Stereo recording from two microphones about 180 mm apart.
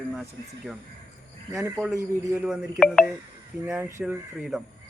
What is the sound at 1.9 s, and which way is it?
Speech, 15° right (ahead or behind).